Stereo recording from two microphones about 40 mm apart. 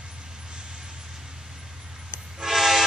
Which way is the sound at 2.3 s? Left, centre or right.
Centre.